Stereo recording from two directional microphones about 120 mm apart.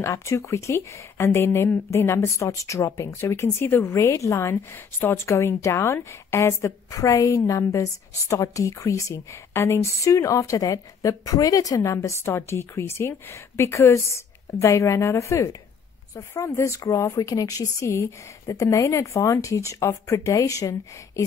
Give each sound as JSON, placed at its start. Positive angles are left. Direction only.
{"t": 0.0, "sound": "speech", "side_deg": 25}